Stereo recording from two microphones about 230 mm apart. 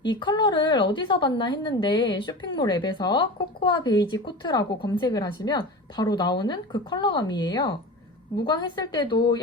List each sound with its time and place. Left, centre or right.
0.0 s speech: centre